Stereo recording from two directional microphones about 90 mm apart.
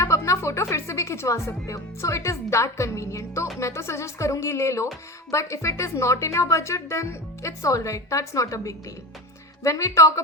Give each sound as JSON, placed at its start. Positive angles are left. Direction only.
{"t": 0.0, "sound": "speech", "side_deg": 35}